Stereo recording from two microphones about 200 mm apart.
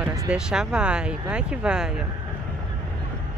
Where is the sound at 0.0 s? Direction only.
15° right (ahead or behind).